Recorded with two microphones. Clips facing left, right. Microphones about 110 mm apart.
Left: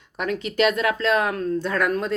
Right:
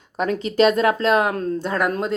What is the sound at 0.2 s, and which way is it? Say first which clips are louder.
Speech: right 4 dB; 35° right (ahead or behind).